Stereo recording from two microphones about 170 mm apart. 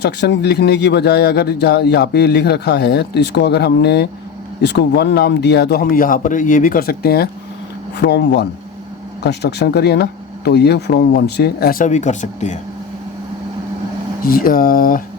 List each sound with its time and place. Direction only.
0.0 s speech: 80° left
7.9 s speech: 85° left; by 12.5 s 45° left (ahead or behind)
14.3 s speech: 55° left (ahead or behind)